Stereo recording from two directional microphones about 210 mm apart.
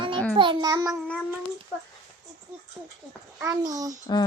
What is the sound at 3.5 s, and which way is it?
Speech, 15° right (ahead or behind).